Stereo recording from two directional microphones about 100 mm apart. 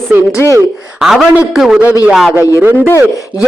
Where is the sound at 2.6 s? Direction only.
20° right (ahead or behind).